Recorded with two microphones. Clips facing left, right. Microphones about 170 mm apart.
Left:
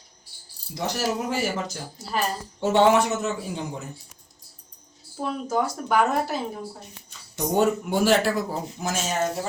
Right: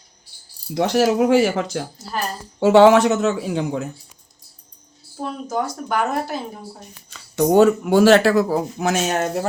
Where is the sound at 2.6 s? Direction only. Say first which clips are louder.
Right 7 dB; 90° right.